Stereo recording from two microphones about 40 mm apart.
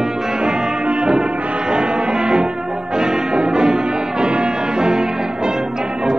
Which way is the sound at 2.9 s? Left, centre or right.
Centre.